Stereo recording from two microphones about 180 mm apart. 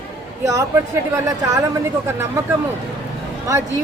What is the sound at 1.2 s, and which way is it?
Speech, 15° right (ahead or behind).